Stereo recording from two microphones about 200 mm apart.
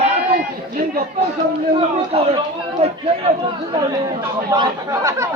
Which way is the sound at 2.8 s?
30° right (ahead or behind).